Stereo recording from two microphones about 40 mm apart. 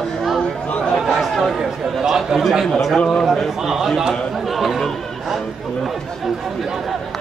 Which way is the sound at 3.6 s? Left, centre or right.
Centre.